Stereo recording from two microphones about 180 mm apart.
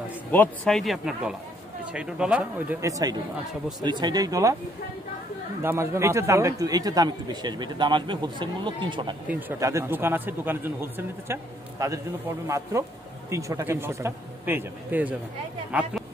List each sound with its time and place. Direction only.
0.3 s speech: 5° left (ahead or behind)
2.8 s a man's voice: 20° right (ahead or behind)
5.6 s a man's voice: 15° right (ahead or behind)
9.3 s speech: 15° right (ahead or behind)